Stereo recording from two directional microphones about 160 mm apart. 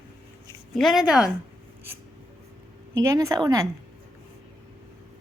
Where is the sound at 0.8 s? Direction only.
Centre (ahead or behind).